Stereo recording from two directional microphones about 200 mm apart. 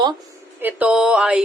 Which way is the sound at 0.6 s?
10° right (ahead or behind).